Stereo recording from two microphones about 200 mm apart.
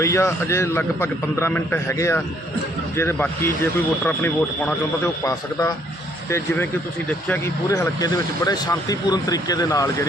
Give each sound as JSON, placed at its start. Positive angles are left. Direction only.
{"t": 0.0, "sound": "speech", "side_deg": 15}
{"t": 7.3, "sound": "speech", "side_deg": 15}